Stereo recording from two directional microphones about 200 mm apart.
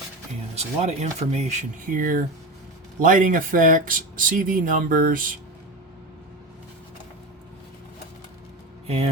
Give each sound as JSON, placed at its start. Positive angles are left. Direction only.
{"t": 0.5, "sound": "speech", "side_deg": -30}